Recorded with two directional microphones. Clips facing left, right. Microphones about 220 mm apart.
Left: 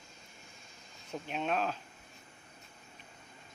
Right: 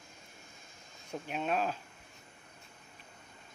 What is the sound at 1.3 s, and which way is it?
Speech, 5° right (ahead or behind).